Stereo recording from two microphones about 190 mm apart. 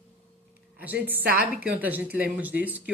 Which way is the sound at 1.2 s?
50° right (ahead or behind).